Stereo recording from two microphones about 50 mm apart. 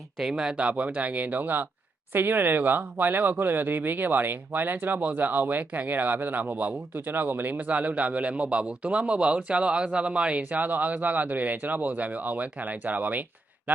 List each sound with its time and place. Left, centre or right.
0.2 s speech: centre
0.5 s speech: right
6.9 s speech: right